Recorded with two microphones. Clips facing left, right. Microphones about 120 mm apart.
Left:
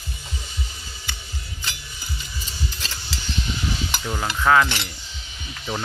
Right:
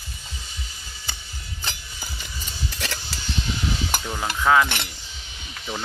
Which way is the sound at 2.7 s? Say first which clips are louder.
Right 4 dB; 65° right (ahead or behind).